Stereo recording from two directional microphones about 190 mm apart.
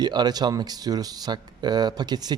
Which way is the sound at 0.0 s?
20° right (ahead or behind).